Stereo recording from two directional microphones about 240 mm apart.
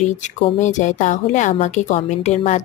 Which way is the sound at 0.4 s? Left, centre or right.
Left.